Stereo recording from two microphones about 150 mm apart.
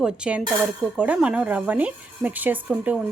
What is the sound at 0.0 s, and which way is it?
A woman's voice, 5° right (ahead or behind).